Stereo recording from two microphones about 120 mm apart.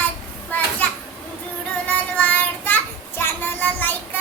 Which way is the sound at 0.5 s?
15° left (ahead or behind).